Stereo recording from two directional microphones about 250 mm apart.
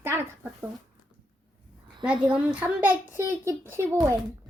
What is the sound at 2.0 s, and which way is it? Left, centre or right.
A child's voice, centre.